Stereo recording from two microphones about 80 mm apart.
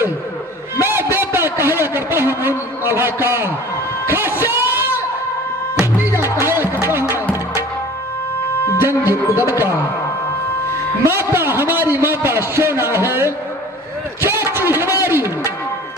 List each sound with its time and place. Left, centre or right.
0.8 s a sound: right
5.8 s music: right
8.8 s music: right
11.0 s a man's voice: right
14.2 s a sound: right
15.0 s music: right